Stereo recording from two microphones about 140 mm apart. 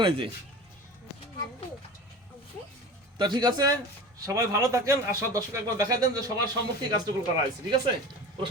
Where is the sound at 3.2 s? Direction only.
30° right (ahead or behind).